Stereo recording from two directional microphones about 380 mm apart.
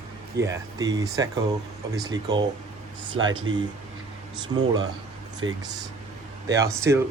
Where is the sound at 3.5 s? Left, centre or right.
Centre.